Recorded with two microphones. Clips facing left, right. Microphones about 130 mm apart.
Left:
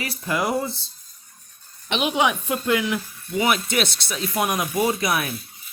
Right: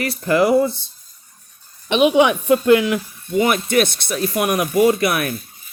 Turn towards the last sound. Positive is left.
turn(degrees=-60)  # may be behind; listen again after turning